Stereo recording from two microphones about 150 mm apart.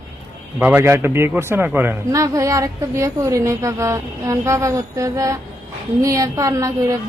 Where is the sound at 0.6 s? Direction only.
15° right (ahead or behind).